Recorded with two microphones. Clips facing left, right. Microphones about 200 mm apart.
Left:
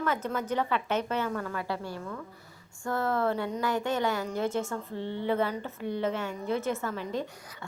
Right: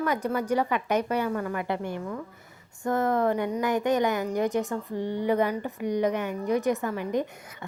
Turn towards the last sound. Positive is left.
turn(degrees=-20)  # may be behind; listen again after turning